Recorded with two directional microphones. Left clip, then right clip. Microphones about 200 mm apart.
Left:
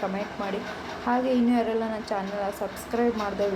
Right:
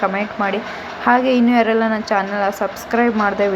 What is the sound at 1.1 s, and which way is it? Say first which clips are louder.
A woman's voice: right 10 dB; 10° right (ahead or behind).